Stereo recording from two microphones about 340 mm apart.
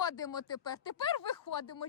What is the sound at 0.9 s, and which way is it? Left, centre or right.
Speech, left.